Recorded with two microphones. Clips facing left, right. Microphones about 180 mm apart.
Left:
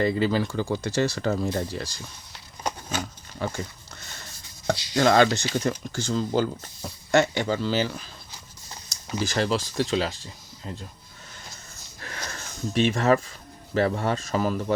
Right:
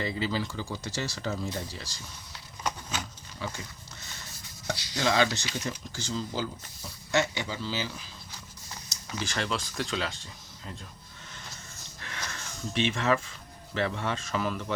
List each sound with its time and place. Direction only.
0.0 s speech: 55° left (ahead or behind)
2.6 s a sound: 45° left (ahead or behind)
4.6 s chopping: 55° left (ahead or behind)
5.5 s speech: 50° left (ahead or behind)
8.9 s speech: 40° left (ahead or behind)
11.9 s a sound: 40° left (ahead or behind)
13.7 s speech: 40° left (ahead or behind)